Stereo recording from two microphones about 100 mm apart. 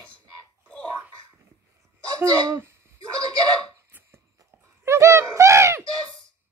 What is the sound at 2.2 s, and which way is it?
Speech, 25° right (ahead or behind).